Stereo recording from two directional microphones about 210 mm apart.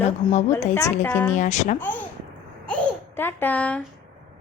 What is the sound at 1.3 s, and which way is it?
Speech, 35° left (ahead or behind).